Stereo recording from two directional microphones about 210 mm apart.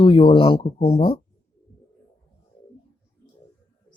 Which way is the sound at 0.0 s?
25° left (ahead or behind).